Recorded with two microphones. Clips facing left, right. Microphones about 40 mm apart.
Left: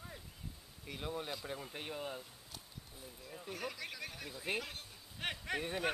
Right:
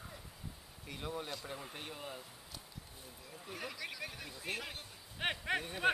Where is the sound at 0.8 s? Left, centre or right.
Centre.